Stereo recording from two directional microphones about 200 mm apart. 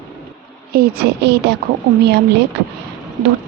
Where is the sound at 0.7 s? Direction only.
50° right (ahead or behind).